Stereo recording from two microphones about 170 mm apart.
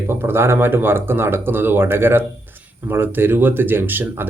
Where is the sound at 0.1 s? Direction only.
15° right (ahead or behind).